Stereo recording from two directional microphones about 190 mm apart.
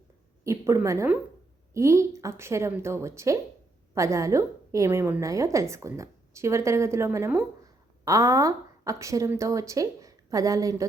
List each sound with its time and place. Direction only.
0.4 s a woman's voice: 15° right (ahead or behind)